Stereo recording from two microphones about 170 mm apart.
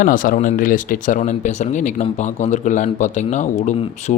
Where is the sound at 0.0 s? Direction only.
55° left (ahead or behind).